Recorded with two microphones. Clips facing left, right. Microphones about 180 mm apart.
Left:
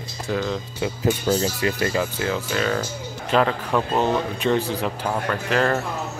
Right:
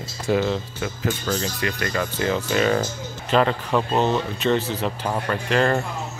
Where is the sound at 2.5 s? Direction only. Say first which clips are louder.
Right 4 dB; 10° right (ahead or behind).